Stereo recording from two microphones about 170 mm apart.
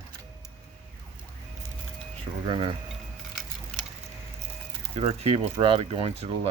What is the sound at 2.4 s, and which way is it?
Speech, 30° right (ahead or behind).